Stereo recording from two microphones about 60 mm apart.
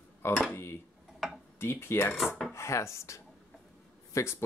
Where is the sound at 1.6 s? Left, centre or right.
Left.